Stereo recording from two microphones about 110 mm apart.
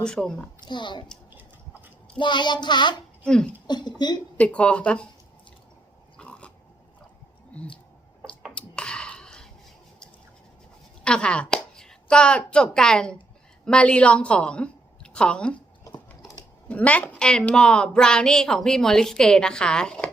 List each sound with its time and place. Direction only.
0.0 s a woman's voice: 5° left (ahead or behind)
0.6 s speech: 45° left (ahead or behind)
2.1 s speech: 45° left (ahead or behind)
3.2 s a woman's voice: 5° left (ahead or behind)
3.7 s speech: 40° left (ahead or behind)
4.4 s a woman's voice: 10° left (ahead or behind)
6.1 s dog: 10° left (ahead or behind)
8.5 s finger snapping: 10° left (ahead or behind)
11.0 s a woman's voice: 10° left (ahead or behind)
16.6 s a woman's voice: 15° left (ahead or behind)